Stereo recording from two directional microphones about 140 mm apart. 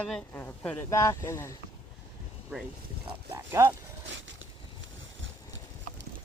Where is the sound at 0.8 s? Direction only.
20° left (ahead or behind).